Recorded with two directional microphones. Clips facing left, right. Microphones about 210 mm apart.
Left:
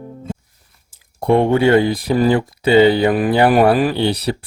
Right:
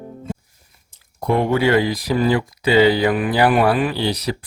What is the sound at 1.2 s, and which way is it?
A man's voice, 25° left (ahead or behind).